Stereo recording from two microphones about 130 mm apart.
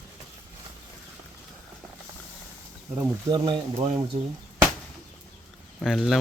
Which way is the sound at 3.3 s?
35° right (ahead or behind).